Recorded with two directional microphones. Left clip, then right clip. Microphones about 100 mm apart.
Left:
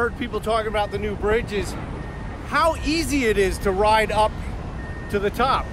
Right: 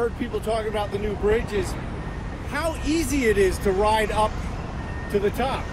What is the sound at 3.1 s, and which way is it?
Speech, 65° left (ahead or behind).